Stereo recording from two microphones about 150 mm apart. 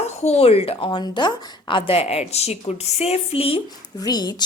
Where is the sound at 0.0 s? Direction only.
45° left (ahead or behind).